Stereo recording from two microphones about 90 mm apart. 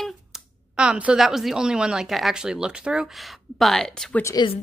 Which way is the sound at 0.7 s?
10° right (ahead or behind).